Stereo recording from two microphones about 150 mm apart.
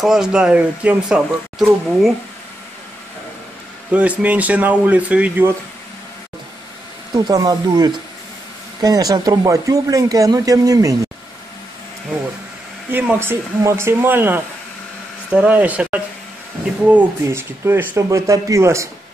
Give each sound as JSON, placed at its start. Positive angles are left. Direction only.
{"t": 0.0, "sound": "speech", "side_deg": -5}
{"t": 3.9, "sound": "speech", "side_deg": -10}
{"t": 7.2, "sound": "speech", "side_deg": -25}
{"t": 12.9, "sound": "speech", "side_deg": -15}